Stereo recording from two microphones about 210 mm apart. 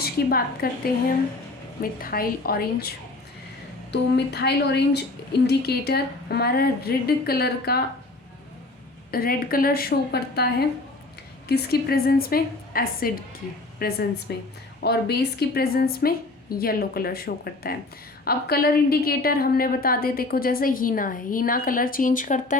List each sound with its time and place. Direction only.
0.0 s a woman's voice: 45° left (ahead or behind)
3.9 s a woman's voice: 50° left (ahead or behind)
9.1 s a woman's voice: 45° left (ahead or behind)